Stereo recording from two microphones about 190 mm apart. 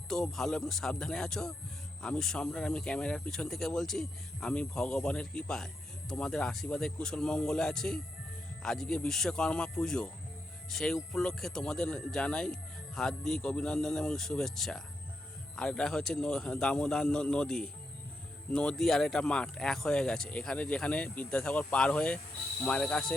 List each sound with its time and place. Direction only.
0.1 s speech: centre (ahead or behind)